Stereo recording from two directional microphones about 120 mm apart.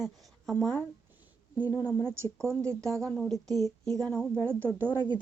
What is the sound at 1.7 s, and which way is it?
Speech, 25° left (ahead or behind).